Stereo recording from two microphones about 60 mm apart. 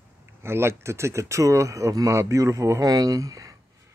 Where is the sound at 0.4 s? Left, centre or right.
Right.